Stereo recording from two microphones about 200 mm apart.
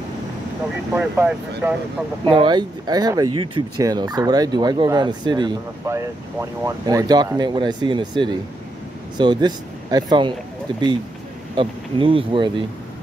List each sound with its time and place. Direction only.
0.9 s speech: 10° right (ahead or behind)
2.2 s speech: 20° right (ahead or behind)
11.5 s speech: 25° right (ahead or behind)